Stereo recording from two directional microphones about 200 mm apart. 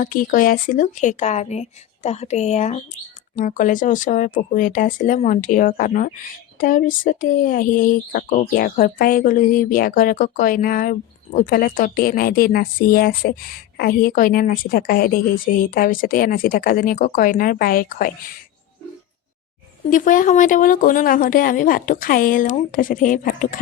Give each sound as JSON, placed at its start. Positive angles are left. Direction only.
{"t": 0.0, "sound": "speech", "side_deg": 45}
{"t": 19.9, "sound": "speech", "side_deg": 40}